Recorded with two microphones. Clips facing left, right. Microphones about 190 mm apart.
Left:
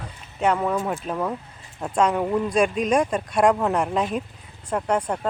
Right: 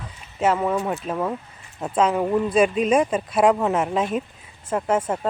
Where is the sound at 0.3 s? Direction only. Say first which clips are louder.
Right 1 dB; 5° right (ahead or behind).